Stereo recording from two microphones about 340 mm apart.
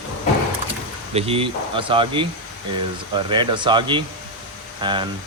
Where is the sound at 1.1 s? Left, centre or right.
Centre.